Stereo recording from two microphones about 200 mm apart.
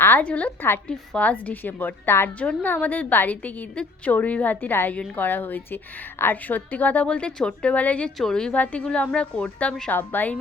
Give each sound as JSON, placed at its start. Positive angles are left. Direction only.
{"t": 0.0, "sound": "a woman's voice", "side_deg": 10}